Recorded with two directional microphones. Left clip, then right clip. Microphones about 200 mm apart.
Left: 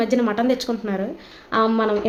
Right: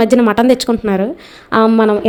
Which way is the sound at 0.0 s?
45° right (ahead or behind).